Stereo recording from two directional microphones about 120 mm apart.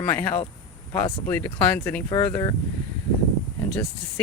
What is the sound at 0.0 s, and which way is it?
Speech, 15° left (ahead or behind).